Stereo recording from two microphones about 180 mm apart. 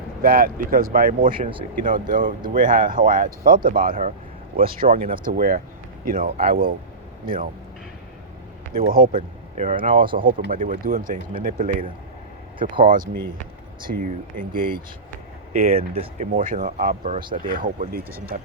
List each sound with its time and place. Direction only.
0.2 s speech: 55° right (ahead or behind)
1.4 s speech: 30° right (ahead or behind)
1.8 s speech: 45° right (ahead or behind)
8.7 s speech: 50° right (ahead or behind)
10.0 s speech: 30° right (ahead or behind)
10.2 s speech: 50° right (ahead or behind)
12.5 s speech: 30° right (ahead or behind)
14.0 s speech: 50° right (ahead or behind)
15.8 s speech: 35° right (ahead or behind)
16.3 s speech: 50° right (ahead or behind)